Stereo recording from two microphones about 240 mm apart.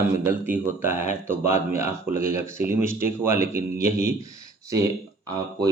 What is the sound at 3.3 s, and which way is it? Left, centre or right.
Speech, right.